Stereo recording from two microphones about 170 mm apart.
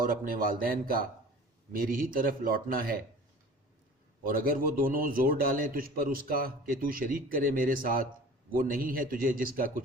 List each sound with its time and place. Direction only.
0.0 s a man's voice: 55° right (ahead or behind)
4.2 s a man's voice: 55° right (ahead or behind)